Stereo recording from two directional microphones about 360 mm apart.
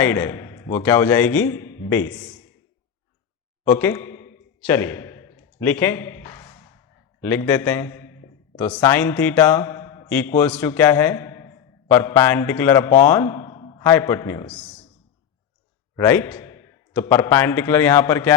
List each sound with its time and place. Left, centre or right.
0.0 s a man's voice: centre
3.7 s a sound: centre
7.2 s a man's voice: centre
16.0 s a man's voice: centre